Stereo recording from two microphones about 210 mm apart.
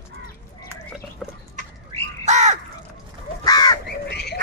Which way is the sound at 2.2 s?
35° right (ahead or behind).